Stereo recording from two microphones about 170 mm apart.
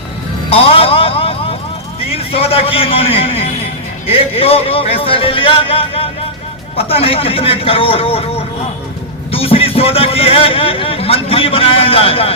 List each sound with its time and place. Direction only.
0.5 s vehicle: 35° left (ahead or behind)
2.0 s speech: 35° left (ahead or behind)